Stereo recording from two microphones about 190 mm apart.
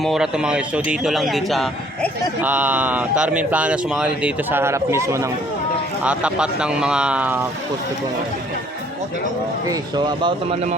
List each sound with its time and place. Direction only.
0.0 s a man's voice: centre (ahead or behind)
9.6 s speech: 25° right (ahead or behind)